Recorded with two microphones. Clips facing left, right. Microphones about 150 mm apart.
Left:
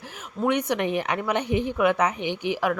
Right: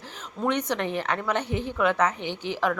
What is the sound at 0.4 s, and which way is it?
Speech, 10° left (ahead or behind).